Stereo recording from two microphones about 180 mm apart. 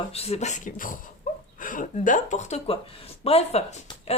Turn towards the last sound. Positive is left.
turn(degrees=35)  # may be behind; listen again after turning